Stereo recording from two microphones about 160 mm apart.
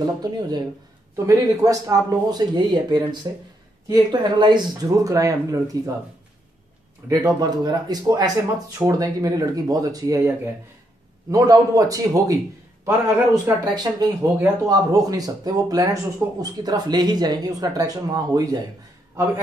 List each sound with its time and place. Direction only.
0.0 s speech: 25° right (ahead or behind)
7.1 s speech: 25° right (ahead or behind)